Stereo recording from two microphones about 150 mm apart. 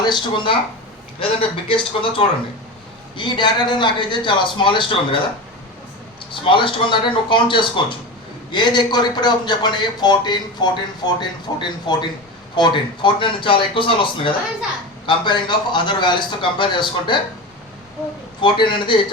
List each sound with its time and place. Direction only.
0.0 s a man's voice: 30° left (ahead or behind)
6.3 s a man's voice: 35° left (ahead or behind)
18.4 s a man's voice: 30° left (ahead or behind)